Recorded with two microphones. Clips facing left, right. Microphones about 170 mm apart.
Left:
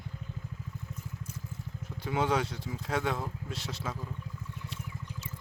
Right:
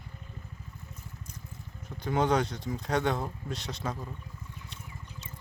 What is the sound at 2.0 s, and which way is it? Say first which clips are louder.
Speech: right 3 dB; 5° left (ahead or behind).